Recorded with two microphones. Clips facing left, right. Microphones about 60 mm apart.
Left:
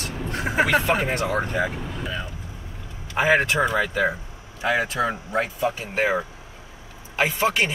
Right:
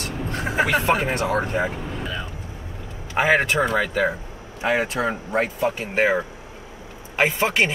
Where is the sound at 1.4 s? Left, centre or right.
Right.